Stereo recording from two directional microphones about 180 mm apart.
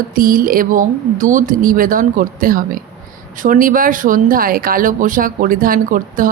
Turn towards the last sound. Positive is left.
turn(degrees=-50)  # may be behind; listen again after turning